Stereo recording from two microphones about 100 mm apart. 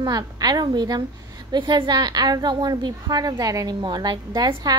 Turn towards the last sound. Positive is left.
turn(degrees=-40)  # may be behind; listen again after turning